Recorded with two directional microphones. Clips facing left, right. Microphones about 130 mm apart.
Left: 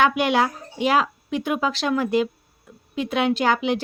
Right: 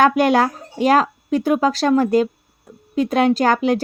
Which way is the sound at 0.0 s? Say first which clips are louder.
Right 5 dB; 40° right (ahead or behind).